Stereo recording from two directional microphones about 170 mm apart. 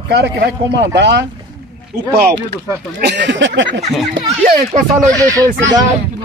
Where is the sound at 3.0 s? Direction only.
85° right.